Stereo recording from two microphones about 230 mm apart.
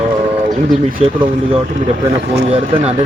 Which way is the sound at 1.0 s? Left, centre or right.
Right.